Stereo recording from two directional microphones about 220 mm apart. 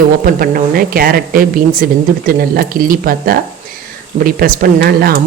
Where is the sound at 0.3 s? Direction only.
40° right (ahead or behind).